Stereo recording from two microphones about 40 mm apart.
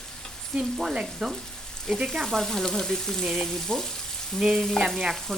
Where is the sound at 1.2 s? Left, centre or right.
Centre.